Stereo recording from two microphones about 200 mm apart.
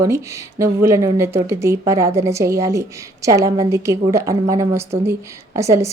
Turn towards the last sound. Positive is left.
turn(degrees=-15)  # may be behind; listen again after turning